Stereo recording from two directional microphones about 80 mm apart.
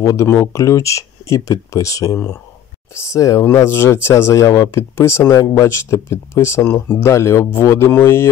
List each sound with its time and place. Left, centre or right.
0.0 s speech: left